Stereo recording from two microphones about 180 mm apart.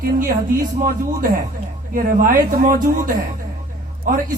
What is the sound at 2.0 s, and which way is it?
Speech, 50° right (ahead or behind).